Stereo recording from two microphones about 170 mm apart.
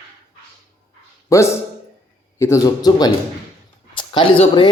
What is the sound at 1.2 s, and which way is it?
A man's voice, 15° left (ahead or behind).